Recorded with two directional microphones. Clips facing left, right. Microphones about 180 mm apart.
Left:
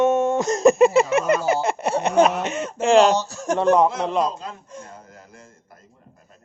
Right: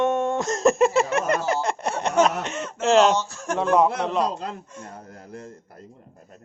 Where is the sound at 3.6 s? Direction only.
Centre (ahead or behind).